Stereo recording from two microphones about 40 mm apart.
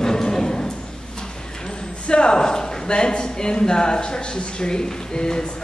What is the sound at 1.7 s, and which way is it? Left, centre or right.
Speech, left.